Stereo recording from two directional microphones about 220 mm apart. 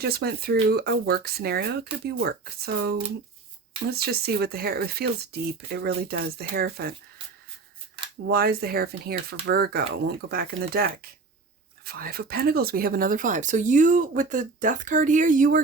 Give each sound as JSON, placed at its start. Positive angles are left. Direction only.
{"t": 0.0, "sound": "speech", "side_deg": -45}
{"t": 8.3, "sound": "speech", "side_deg": -45}